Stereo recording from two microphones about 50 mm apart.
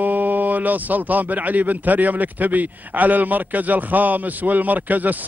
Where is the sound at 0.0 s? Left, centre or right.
Right.